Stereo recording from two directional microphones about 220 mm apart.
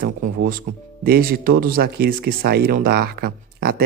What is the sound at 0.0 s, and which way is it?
Speech, 40° right (ahead or behind).